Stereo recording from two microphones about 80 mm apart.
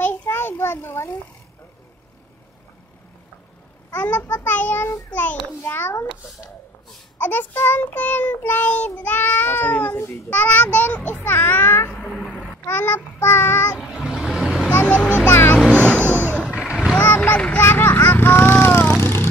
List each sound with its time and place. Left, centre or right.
0.0 s a sound: left
3.9 s a child's voice: left
4.4 s child singing: left
5.5 s a child's voice: left
7.2 s child singing: left
12.0 s cat: centre
12.6 s child singing: left
13.7 s vehicle: centre
14.7 s vehicle: left
15.0 s speech: centre
15.7 s vehicle: centre
16.4 s vehicle: centre
17.0 s speech: left
17.6 s vehicle: left